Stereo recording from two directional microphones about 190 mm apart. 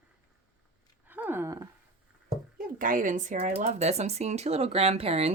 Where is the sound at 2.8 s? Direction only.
45° right (ahead or behind).